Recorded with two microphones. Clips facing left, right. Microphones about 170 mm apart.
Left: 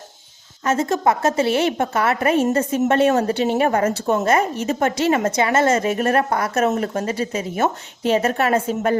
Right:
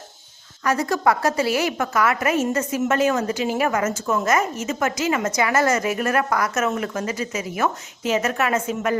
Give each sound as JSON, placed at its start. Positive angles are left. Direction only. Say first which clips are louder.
{"t": 0.6, "sound": "a woman's voice", "louder": "left 2 dB", "side_deg": 25}